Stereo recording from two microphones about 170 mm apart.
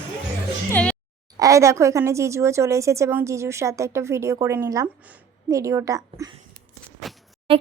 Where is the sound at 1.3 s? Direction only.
20° right (ahead or behind).